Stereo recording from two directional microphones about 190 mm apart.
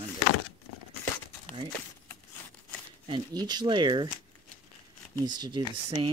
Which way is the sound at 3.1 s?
20° right (ahead or behind).